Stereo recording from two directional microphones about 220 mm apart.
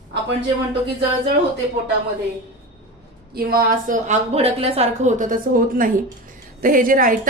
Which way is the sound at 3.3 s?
40° right (ahead or behind).